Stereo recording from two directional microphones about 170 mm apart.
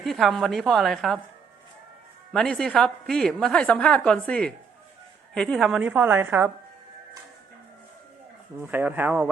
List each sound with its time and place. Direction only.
0.0 s a woman's voice: centre (ahead or behind)
2.3 s a woman's voice: 5° left (ahead or behind); by 6.5 s 15° right (ahead or behind)
8.5 s a woman's voice: 10° right (ahead or behind)